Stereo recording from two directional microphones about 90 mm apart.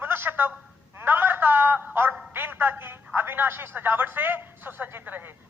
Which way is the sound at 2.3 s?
25° right (ahead or behind).